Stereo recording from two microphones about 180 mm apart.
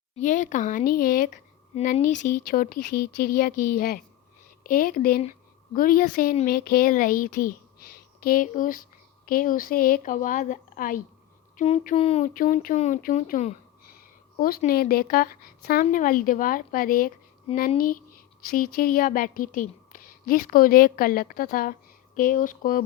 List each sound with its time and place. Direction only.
0.2 s a woman's voice: 45° left (ahead or behind)
12.3 s a woman's voice: 45° left (ahead or behind)